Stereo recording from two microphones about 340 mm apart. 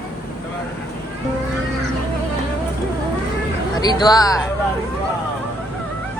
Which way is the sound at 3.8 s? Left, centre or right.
Centre.